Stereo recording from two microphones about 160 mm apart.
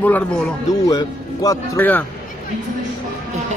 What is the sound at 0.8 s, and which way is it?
Speech, 20° left (ahead or behind).